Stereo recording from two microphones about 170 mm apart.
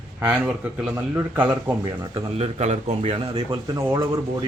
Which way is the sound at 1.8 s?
35° right (ahead or behind).